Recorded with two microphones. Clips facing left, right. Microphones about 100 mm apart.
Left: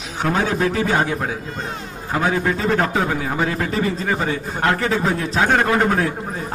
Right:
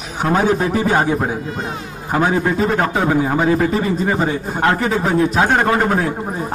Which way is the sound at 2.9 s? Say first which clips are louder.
Right 5 dB; 25° right (ahead or behind).